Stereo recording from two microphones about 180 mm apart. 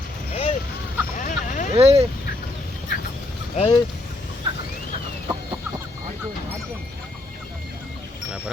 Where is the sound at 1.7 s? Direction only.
35° right (ahead or behind).